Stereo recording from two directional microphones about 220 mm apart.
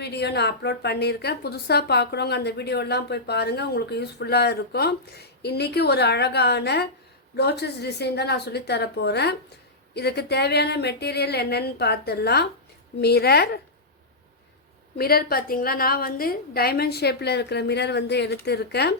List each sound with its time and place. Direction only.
0.0 s a woman's voice: 50° left (ahead or behind)
14.9 s a woman's voice: 45° left (ahead or behind)